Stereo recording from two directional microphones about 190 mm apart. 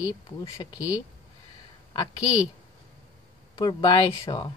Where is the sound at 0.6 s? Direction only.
20° left (ahead or behind).